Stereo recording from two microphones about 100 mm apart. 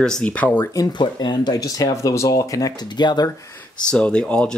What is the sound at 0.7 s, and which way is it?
Speech, 45° left (ahead or behind).